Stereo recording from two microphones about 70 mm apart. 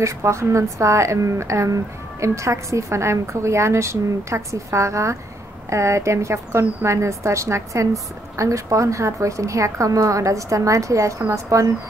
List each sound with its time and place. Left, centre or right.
0.0 s a woman's voice: right